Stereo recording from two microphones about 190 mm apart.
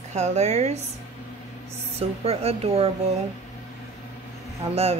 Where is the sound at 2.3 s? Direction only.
30° right (ahead or behind).